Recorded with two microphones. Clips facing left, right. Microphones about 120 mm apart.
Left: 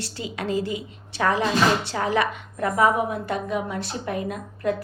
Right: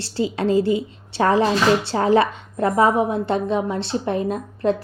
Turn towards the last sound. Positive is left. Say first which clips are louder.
# right 5 dB
turn(degrees=-30)  # may be behind; listen again after turning